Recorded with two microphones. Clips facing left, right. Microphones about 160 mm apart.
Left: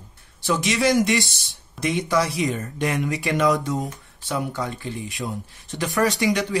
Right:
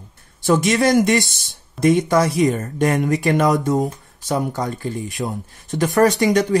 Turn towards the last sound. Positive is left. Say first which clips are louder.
# right 6 dB
turn(degrees=-45)  # may be behind; listen again after turning